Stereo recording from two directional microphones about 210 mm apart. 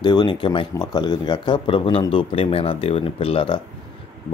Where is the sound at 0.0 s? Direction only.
20° left (ahead or behind).